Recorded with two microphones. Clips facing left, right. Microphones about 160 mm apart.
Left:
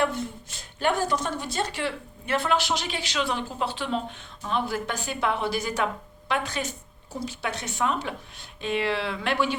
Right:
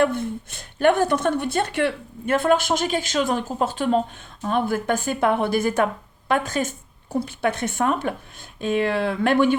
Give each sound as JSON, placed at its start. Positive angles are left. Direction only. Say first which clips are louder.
{"t": 0.0, "sound": "a woman's voice", "louder": "right 6 dB", "side_deg": -55}